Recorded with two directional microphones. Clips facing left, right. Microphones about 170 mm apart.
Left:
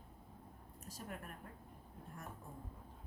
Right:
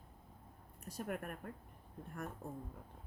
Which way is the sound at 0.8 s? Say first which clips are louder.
Right 7 dB; 60° right (ahead or behind).